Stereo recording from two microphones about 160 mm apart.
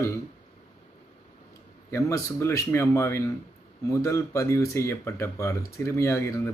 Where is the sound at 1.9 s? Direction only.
15° left (ahead or behind).